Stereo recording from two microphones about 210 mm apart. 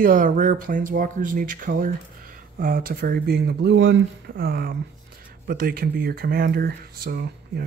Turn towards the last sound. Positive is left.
turn(degrees=-45)  # may be behind; listen again after turning